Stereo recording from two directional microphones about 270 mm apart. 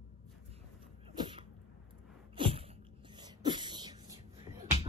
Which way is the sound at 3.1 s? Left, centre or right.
Centre.